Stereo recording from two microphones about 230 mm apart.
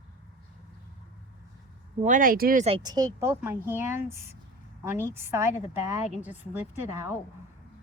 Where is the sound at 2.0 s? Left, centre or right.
Right; by 6.6 s centre.